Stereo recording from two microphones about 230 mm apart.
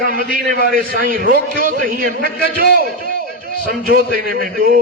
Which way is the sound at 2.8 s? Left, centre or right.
Right.